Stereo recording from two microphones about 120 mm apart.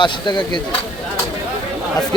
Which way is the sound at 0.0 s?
40° left (ahead or behind).